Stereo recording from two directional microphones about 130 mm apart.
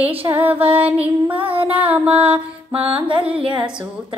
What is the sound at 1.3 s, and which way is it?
Female singing, 45° right (ahead or behind).